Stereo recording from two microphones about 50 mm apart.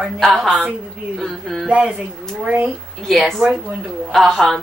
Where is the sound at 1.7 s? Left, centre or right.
Right.